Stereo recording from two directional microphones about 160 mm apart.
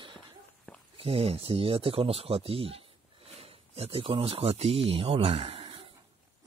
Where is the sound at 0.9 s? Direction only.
35° right (ahead or behind).